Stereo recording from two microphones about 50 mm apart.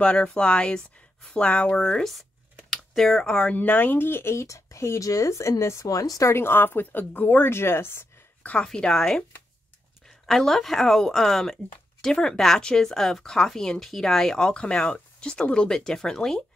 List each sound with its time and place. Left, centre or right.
0.0 s speech: left
3.5 s speech: left
6.4 s speech: left
8.4 s speech: left
8.6 s speech: centre